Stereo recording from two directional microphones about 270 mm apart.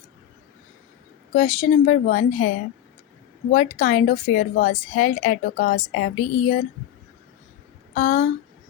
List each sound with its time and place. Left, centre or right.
1.3 s a woman's voice: left
3.5 s a woman's voice: left
7.9 s a woman's voice: left